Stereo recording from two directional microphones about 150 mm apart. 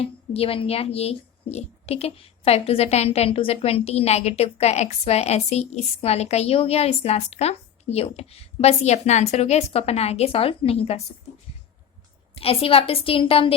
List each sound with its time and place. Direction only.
0.0 s speech: 40° left (ahead or behind)
12.3 s a woman's voice: 40° left (ahead or behind)